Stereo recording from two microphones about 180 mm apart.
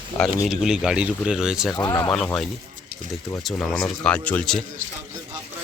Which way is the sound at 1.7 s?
20° left (ahead or behind).